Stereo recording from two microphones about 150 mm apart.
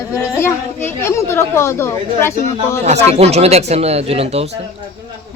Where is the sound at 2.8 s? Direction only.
45° right (ahead or behind).